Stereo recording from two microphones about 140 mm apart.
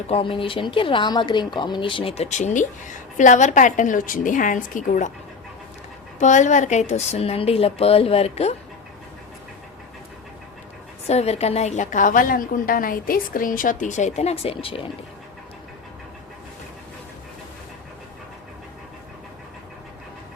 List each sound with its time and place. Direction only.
0.1 s speech: 40° left (ahead or behind); by 5.1 s 65° left (ahead or behind)
6.1 s speech: 60° left (ahead or behind)
11.0 s a woman's voice: 50° left (ahead or behind)